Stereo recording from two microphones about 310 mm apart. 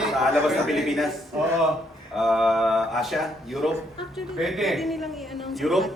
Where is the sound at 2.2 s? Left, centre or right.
Centre.